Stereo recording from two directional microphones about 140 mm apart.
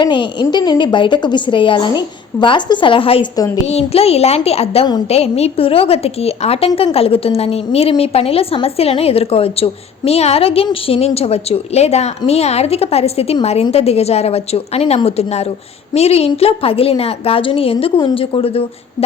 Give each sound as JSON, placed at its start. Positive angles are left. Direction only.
{"t": 0.0, "sound": "a woman's voice", "side_deg": 35}
{"t": 3.3, "sound": "a woman's voice", "side_deg": 25}
{"t": 3.7, "sound": "a woman's voice", "side_deg": 45}